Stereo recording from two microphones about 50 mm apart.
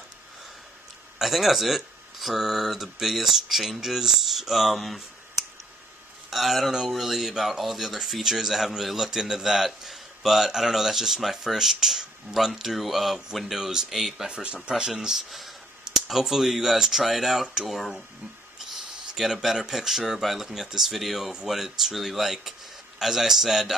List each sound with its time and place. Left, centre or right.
1.1 s speech: centre
6.3 s speech: centre
14.3 s speech: right
14.7 s speech: centre
19.1 s speech: centre